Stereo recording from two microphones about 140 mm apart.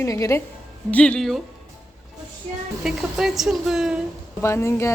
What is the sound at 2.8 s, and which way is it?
A woman's voice, centre (ahead or behind).